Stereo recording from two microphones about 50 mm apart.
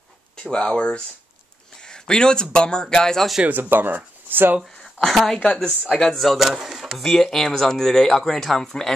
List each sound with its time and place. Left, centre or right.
0.4 s speech: centre
3.4 s speech: right
5.0 s speech: centre
5.4 s speech: left
6.1 s speech: centre
7.0 s speech: centre